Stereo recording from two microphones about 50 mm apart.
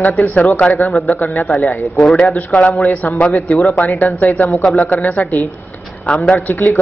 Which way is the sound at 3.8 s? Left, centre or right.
Left.